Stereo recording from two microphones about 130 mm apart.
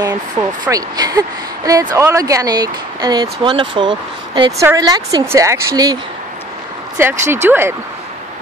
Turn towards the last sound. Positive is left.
turn(degrees=-20)  # may be behind; listen again after turning